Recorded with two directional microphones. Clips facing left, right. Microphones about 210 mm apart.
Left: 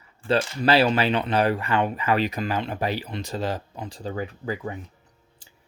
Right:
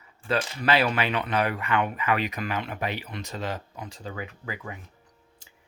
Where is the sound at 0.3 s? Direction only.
30° left (ahead or behind).